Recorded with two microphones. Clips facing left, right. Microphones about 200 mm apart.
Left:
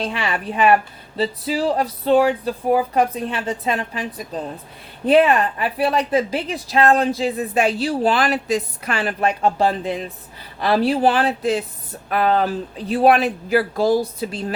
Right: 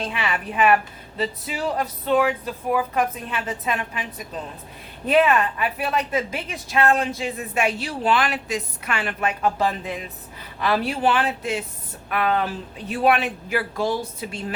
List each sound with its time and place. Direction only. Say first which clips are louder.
0.0 s a woman's voice: left 3 dB; 35° left (ahead or behind)
5.0 s a woman's voice: left 4 dB; 30° left (ahead or behind)